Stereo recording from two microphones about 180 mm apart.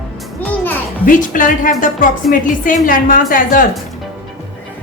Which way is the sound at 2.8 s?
50° left (ahead or behind).